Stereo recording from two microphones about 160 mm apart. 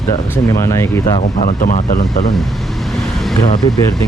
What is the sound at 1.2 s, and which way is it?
Speech, 50° left (ahead or behind).